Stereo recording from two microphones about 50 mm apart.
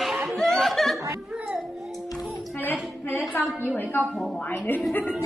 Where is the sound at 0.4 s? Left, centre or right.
Centre.